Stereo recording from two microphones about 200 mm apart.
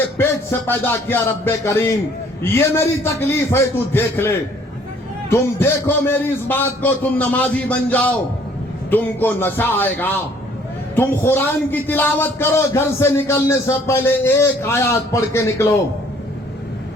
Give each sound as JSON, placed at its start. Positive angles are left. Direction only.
{"t": 0.0, "sound": "a man's voice", "side_deg": 10}